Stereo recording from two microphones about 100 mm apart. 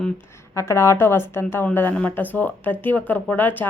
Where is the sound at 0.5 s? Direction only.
30° left (ahead or behind).